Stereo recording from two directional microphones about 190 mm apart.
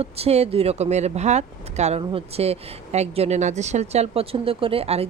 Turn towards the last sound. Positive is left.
turn(degrees=-30)  # may be behind; listen again after turning